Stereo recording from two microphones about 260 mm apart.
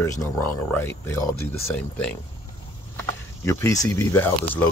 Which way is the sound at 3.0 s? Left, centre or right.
Centre.